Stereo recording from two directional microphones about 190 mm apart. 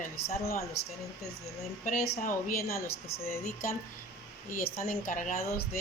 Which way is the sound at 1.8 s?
45° left (ahead or behind).